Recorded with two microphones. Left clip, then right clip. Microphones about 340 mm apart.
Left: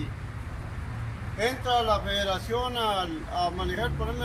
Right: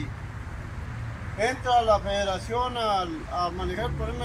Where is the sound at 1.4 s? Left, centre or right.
Centre.